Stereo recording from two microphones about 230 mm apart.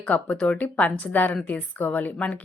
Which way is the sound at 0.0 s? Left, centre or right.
Centre.